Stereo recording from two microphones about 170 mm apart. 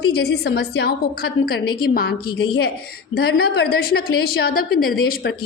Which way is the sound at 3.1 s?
70° left (ahead or behind).